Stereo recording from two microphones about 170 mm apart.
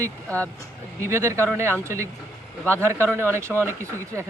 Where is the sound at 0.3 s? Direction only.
10° left (ahead or behind).